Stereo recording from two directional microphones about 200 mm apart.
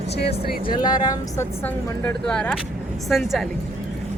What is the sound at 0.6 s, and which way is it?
A woman's voice, 20° left (ahead or behind).